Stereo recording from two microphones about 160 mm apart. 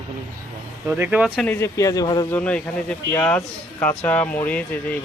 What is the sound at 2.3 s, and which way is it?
Speech, 10° left (ahead or behind).